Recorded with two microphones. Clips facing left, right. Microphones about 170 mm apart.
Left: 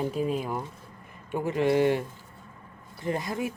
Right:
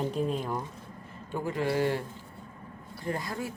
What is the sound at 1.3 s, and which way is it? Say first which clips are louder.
Speech: left 5 dB; 20° left (ahead or behind).